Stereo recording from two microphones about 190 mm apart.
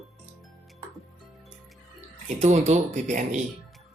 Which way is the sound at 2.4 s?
35° right (ahead or behind).